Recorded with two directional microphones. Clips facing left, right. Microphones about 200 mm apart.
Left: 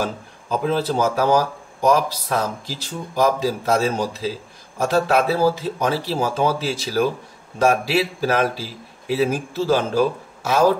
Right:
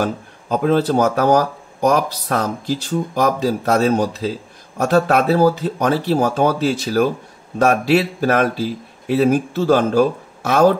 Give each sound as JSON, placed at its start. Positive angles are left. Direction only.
{"t": 0.0, "sound": "speech", "side_deg": -55}